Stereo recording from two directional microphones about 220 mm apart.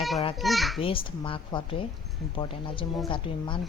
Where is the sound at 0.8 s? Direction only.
25° left (ahead or behind).